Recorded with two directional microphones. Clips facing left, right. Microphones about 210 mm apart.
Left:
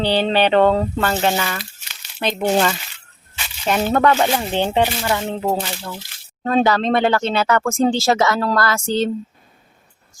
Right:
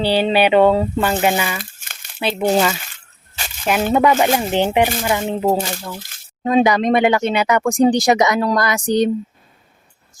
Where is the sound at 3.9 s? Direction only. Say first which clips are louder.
Right 2 dB; 10° right (ahead or behind).